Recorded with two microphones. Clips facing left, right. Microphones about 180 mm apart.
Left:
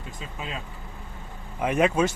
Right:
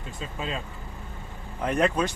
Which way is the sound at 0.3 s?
5° left (ahead or behind).